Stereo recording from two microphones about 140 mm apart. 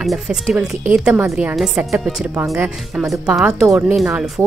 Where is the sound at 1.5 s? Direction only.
Centre (ahead or behind).